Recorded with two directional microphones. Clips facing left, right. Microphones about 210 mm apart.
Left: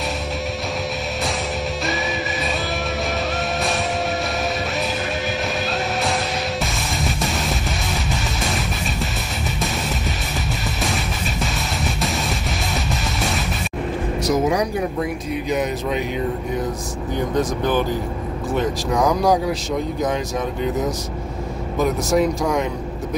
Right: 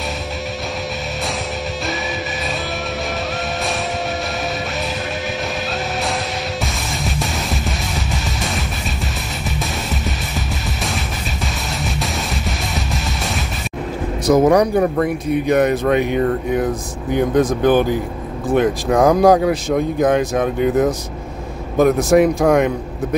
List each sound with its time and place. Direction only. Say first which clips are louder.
6.6 s music: even; centre (ahead or behind)
11.4 s music: right 1 dB; centre (ahead or behind)
14.2 s speech: right 7 dB; 60° right (ahead or behind)